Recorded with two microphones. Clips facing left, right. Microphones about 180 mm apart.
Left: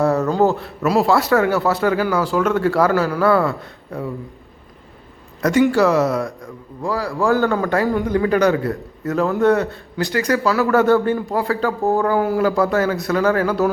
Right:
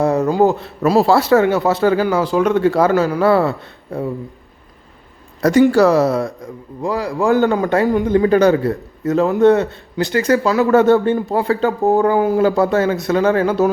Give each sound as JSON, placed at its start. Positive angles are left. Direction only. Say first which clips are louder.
{"t": 0.0, "sound": "speech", "louder": "right 2 dB", "side_deg": -15}
{"t": 0.8, "sound": "a man's voice", "louder": "right 3 dB", "side_deg": -30}
{"t": 5.4, "sound": "a man's voice", "louder": "right 4 dB", "side_deg": -35}
{"t": 8.3, "sound": "a man's voice", "louder": "right 3 dB", "side_deg": -35}
{"t": 8.5, "sound": "a man's voice", "louder": "right 4 dB", "side_deg": -20}